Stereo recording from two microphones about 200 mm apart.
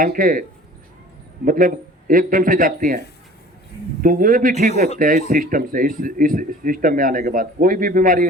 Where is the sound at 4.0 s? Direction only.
45° right (ahead or behind).